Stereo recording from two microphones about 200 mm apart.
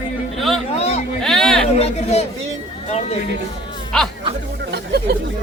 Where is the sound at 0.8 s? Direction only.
30° left (ahead or behind).